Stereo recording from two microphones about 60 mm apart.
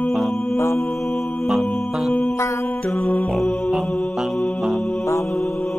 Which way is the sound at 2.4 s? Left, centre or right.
Left.